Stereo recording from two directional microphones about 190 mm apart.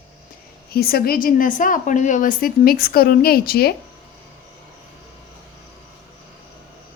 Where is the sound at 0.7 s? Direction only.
55° left (ahead or behind).